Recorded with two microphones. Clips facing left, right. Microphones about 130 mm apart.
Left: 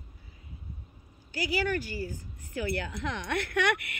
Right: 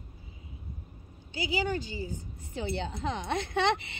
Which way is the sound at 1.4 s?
20° right (ahead or behind).